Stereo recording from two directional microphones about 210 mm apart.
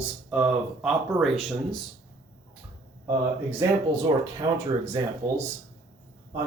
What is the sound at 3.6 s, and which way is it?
Speech, 15° right (ahead or behind).